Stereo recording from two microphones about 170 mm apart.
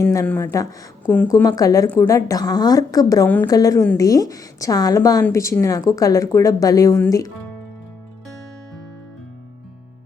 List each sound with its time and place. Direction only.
0.0 s speech: 20° left (ahead or behind)